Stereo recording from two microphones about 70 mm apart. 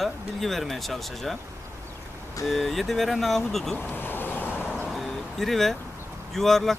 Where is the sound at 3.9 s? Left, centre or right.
Left.